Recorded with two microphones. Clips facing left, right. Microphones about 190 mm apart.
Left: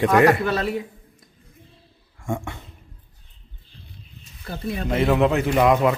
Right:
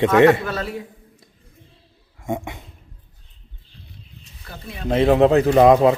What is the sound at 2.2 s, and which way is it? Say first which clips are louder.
Speech: right 2 dB; 20° right (ahead or behind).